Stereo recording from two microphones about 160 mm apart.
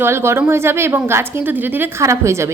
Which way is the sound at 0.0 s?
15° right (ahead or behind).